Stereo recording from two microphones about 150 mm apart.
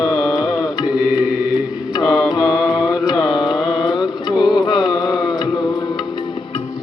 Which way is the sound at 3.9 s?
30° left (ahead or behind).